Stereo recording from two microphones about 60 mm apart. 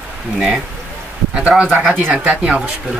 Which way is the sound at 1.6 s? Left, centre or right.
Centre.